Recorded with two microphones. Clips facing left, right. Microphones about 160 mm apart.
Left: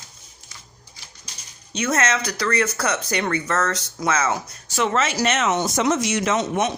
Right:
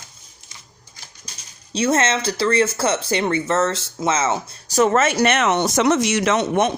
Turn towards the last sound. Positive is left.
turn(degrees=-60)  # may be behind; listen again after turning